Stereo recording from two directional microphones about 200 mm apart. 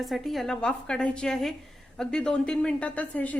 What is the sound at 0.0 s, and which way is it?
A woman's voice, centre (ahead or behind).